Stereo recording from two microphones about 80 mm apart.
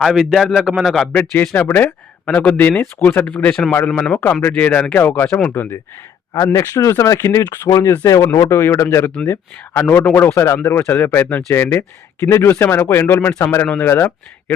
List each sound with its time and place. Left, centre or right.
0.0 s a man's voice: centre
1.1 s speech: left
3.2 s a man's voice: centre
6.3 s speech: left